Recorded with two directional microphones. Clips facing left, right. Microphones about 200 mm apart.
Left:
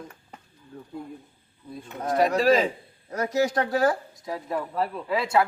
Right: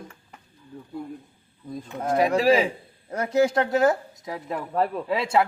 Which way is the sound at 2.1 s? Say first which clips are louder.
Right 1 dB; 10° right (ahead or behind).